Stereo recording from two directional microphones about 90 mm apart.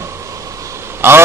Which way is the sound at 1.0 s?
25° right (ahead or behind).